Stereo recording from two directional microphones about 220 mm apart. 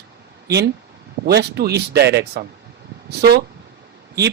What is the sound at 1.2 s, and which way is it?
Speech, 50° right (ahead or behind).